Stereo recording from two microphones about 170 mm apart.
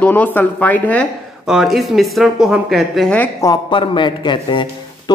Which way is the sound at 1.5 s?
Centre (ahead or behind).